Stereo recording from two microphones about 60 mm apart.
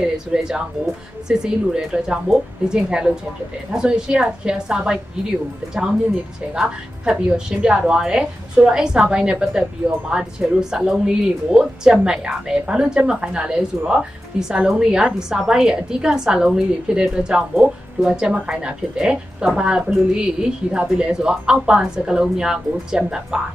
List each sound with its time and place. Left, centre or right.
0.0 s a woman's voice: centre
6.5 s a woman's voice: centre